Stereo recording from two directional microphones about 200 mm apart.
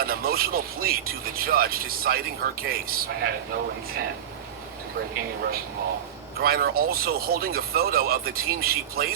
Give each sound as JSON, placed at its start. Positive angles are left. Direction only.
{"t": 0.0, "sound": "speech", "side_deg": -50}
{"t": 6.4, "sound": "speech", "side_deg": -50}